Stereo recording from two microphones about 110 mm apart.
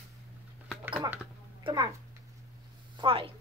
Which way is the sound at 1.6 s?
45° right (ahead or behind).